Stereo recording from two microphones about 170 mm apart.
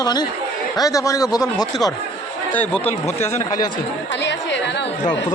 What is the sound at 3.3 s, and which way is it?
Speech, 20° left (ahead or behind).